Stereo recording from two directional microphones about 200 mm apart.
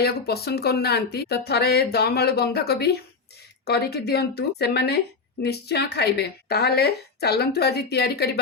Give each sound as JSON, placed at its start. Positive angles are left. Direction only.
{"t": 0.0, "sound": "speech", "side_deg": 50}